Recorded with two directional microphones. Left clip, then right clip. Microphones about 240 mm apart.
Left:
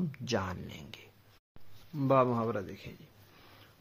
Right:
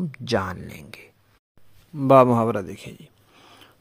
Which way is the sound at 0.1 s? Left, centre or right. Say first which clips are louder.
Right 12 dB; right.